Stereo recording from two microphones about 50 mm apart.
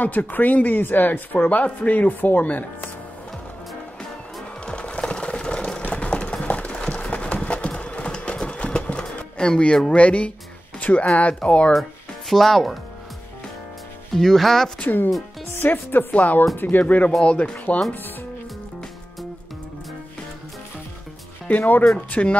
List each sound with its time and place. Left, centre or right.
0.0 s speech: left
4.0 s music: centre
5.9 s clip-clop: left
9.9 s speech: left
10.8 s a sound: left
11.1 s speech: left
12.3 s speech: centre
14.1 s speech: centre
14.8 s speech: left
21.5 s speech: left